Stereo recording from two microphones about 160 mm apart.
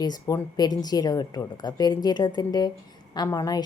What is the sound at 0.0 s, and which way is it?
A woman's voice, 25° left (ahead or behind).